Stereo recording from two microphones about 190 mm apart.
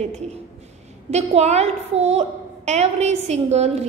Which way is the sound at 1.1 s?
35° right (ahead or behind).